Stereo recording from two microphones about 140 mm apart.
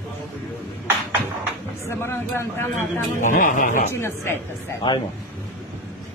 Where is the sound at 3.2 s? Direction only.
70° left (ahead or behind).